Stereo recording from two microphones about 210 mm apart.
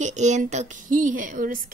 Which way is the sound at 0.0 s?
35° right (ahead or behind).